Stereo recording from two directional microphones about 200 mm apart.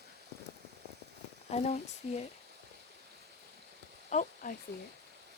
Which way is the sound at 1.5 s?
35° left (ahead or behind).